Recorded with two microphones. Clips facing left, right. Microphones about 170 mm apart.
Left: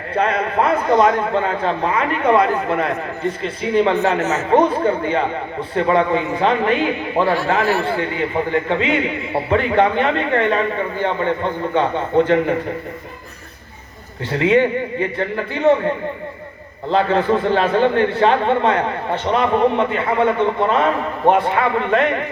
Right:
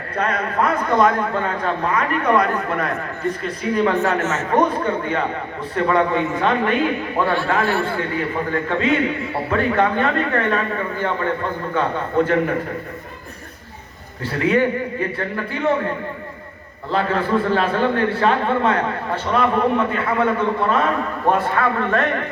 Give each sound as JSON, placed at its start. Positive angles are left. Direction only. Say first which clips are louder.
{"t": 0.1, "sound": "a man's voice", "louder": "left 4 dB", "side_deg": 25}
{"t": 14.3, "sound": "a man's voice", "louder": "left 3 dB", "side_deg": 25}
{"t": 16.9, "sound": "a man's voice", "louder": "left 3 dB", "side_deg": 25}